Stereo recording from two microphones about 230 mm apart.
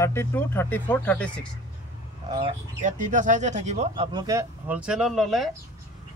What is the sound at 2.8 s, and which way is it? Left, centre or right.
Speech, right.